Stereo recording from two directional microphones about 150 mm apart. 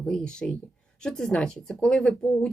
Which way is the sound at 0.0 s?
5° left (ahead or behind).